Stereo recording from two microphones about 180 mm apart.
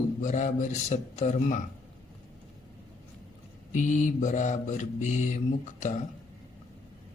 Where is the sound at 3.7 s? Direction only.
45° left (ahead or behind).